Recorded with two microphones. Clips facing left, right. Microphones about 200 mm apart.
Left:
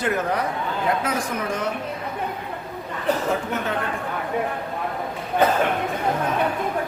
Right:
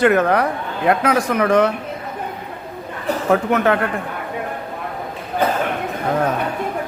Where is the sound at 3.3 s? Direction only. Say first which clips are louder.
Right 9 dB; 70° right (ahead or behind).